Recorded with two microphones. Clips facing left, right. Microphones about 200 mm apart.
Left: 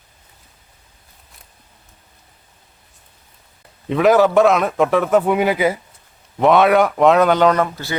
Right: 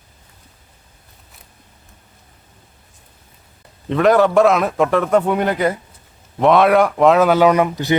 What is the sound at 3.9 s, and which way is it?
Speech, 5° left (ahead or behind).